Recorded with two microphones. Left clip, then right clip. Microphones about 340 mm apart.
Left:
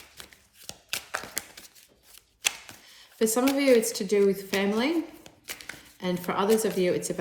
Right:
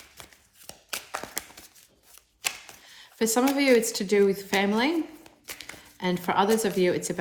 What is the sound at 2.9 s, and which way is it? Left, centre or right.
A woman's voice, right.